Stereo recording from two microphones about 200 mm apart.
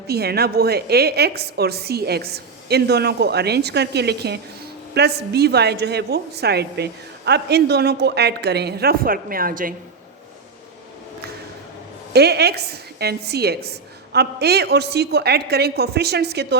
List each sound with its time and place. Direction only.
0.1 s a woman's voice: 55° right (ahead or behind)
12.1 s a woman's voice: 55° right (ahead or behind)